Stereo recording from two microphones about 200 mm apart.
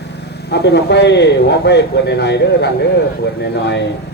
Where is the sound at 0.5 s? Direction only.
55° left (ahead or behind).